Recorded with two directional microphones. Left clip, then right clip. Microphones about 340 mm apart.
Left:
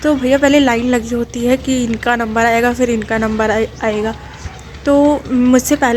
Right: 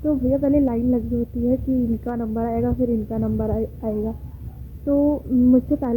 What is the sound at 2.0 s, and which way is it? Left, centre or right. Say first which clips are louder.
Speech: left 13 dB; centre.